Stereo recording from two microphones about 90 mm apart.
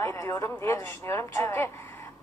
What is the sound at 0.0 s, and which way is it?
Speech, 35° left (ahead or behind).